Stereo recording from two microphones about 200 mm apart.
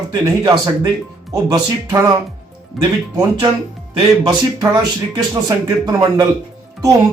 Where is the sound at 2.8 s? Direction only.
Centre (ahead or behind).